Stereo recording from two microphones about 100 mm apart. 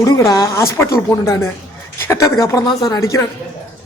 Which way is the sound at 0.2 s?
30° left (ahead or behind).